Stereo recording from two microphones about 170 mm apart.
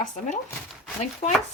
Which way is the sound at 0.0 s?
45° left (ahead or behind).